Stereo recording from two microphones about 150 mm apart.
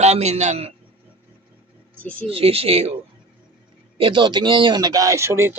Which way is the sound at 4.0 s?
35° right (ahead or behind).